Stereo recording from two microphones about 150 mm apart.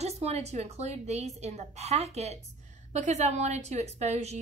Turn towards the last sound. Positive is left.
turn(degrees=-45)  # may be behind; listen again after turning